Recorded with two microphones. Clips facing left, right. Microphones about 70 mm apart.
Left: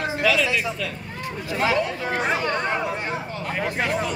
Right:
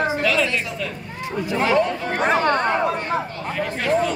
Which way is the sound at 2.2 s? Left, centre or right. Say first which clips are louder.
Right 7 dB; right.